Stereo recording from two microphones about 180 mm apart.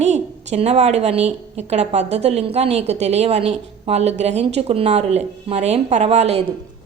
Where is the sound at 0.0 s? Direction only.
40° right (ahead or behind).